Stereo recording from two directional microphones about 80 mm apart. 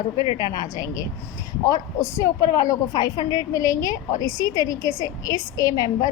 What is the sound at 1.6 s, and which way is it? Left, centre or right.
A woman's voice, left.